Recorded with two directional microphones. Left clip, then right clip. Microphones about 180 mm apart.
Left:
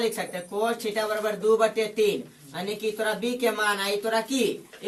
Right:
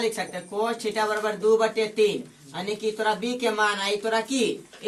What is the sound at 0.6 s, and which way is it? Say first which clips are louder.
A man's voice: right 1 dB; 20° right (ahead or behind).